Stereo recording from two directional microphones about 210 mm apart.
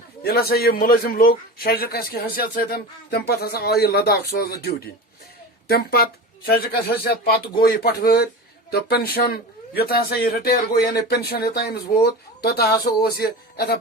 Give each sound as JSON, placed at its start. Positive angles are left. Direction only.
{"t": 0.2, "sound": "a man's voice", "side_deg": 45}